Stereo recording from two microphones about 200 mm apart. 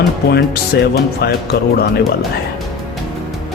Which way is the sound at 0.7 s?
55° left (ahead or behind).